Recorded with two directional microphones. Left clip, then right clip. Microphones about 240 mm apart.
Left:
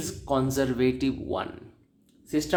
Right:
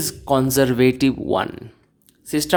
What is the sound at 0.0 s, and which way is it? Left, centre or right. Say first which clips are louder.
A woman's voice: right 8 dB; right.